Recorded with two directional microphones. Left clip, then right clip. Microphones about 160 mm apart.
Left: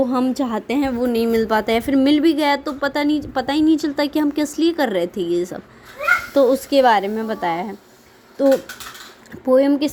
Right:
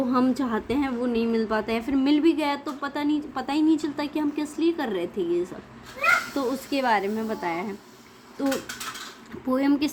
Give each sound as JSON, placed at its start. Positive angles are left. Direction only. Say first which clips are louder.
{"t": 0.1, "sound": "a woman's voice", "louder": "left 4 dB", "side_deg": 30}
{"t": 9.5, "sound": "speech", "louder": "left 9 dB", "side_deg": 25}